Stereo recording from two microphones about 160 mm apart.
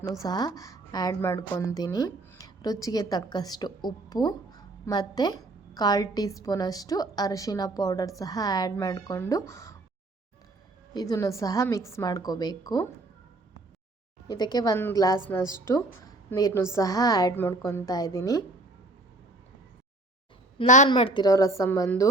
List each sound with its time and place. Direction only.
0.0 s a woman's voice: 25° left (ahead or behind)
10.9 s a woman's voice: 20° left (ahead or behind)
14.3 s a woman's voice: 25° left (ahead or behind)
20.7 s a woman's voice: 50° left (ahead or behind)
20.9 s a woman's voice: 30° left (ahead or behind)